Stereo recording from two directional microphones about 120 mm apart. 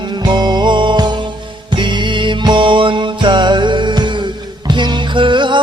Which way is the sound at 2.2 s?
40° right (ahead or behind).